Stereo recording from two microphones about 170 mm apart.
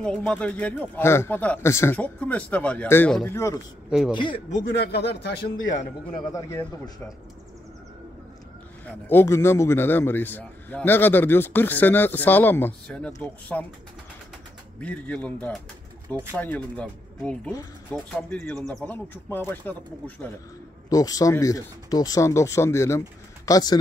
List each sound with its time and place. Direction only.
0.0 s a man's voice: 5° left (ahead or behind)
4.1 s speech: 30° left (ahead or behind)
4.6 s speech: 75° left (ahead or behind)
9.0 s a man's voice: 15° left (ahead or behind)
14.8 s a man's voice: 10° left (ahead or behind)
20.9 s speech: 20° left (ahead or behind)